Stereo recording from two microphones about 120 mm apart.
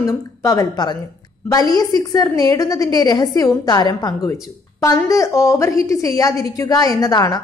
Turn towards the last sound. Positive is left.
turn(degrees=30)  # may be behind; listen again after turning